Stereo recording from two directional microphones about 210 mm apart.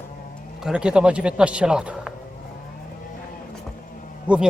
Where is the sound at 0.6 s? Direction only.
5° right (ahead or behind).